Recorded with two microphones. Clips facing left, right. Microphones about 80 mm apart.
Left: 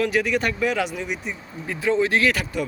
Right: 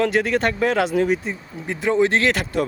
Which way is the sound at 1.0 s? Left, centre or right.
Right.